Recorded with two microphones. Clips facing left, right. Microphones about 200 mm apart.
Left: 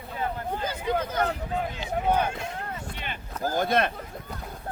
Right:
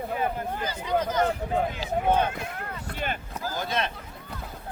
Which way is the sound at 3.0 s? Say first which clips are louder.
Right 10 dB; 45° right (ahead or behind).